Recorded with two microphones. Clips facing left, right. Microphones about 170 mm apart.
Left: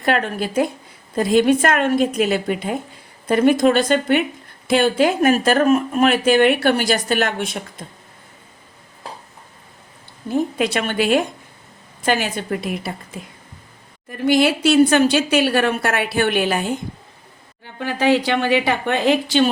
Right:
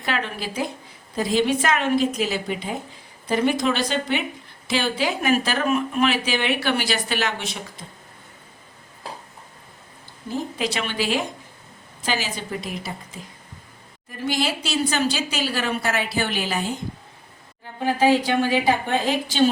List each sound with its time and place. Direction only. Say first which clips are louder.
0.0 s speech: left 7 dB; 50° left (ahead or behind)
10.3 s a woman's voice: left 7 dB; 55° left (ahead or behind)
17.6 s speech: right 1 dB; 70° left (ahead or behind)